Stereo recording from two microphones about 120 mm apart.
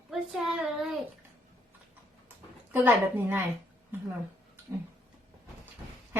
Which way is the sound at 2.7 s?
15° right (ahead or behind).